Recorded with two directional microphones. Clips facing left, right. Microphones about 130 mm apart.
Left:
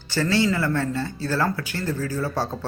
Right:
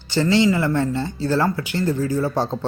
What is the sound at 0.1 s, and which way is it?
A man's voice, 20° right (ahead or behind).